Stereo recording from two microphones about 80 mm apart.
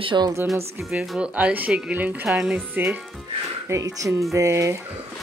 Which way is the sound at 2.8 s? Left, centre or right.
Right.